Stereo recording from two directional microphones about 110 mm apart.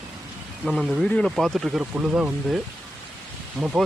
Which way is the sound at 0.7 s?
5° right (ahead or behind).